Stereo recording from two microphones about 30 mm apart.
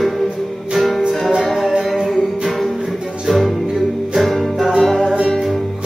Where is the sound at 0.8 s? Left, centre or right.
Centre.